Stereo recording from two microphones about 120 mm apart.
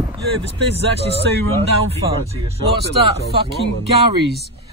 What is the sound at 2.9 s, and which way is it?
Speech, 50° right (ahead or behind).